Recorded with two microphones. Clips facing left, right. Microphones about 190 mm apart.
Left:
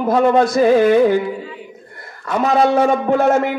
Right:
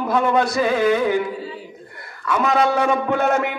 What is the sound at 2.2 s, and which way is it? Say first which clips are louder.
Speech: left 3 dB; 30° left (ahead or behind).